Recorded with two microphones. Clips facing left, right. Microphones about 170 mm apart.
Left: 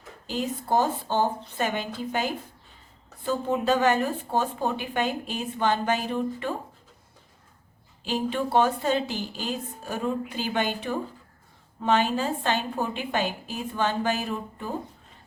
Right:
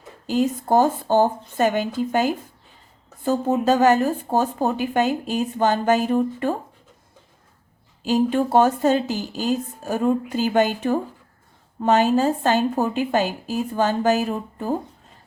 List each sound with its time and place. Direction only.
0.3 s speech: 45° right (ahead or behind)
8.0 s a woman's voice: 45° right (ahead or behind)